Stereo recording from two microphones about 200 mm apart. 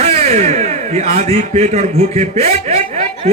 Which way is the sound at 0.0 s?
30° right (ahead or behind).